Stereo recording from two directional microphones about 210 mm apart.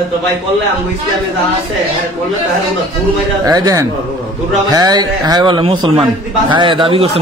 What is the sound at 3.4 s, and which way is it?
A man's voice, 15° right (ahead or behind).